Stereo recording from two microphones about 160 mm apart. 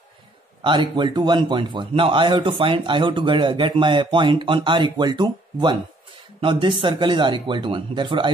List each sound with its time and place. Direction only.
0.7 s speech: 30° right (ahead or behind)